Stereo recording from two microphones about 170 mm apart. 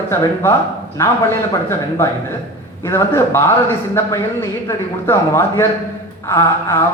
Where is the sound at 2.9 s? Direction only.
15° left (ahead or behind).